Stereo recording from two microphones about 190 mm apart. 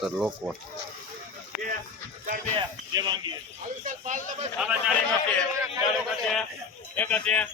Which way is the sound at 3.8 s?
40° right (ahead or behind).